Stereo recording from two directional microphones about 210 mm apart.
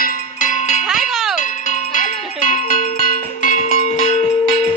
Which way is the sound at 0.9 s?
Centre (ahead or behind).